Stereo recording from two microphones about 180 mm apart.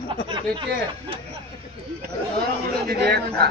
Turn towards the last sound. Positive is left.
turn(degrees=-60)  # may be behind; listen again after turning